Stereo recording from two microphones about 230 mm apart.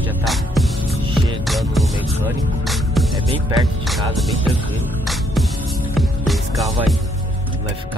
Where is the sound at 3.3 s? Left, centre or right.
Right.